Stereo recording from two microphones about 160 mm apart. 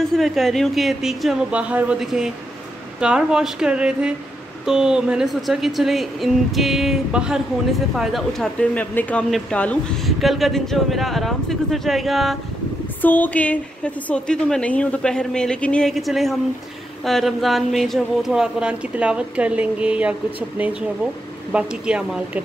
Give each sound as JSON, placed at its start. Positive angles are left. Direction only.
{"t": 0.1, "sound": "speech", "side_deg": 0}
{"t": 13.0, "sound": "a woman's voice", "side_deg": 10}